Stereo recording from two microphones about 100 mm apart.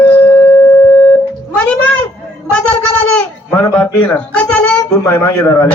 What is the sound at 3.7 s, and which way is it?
A woman's voice, 15° left (ahead or behind).